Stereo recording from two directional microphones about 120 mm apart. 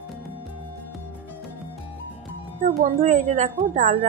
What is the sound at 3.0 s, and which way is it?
Speech, 85° right.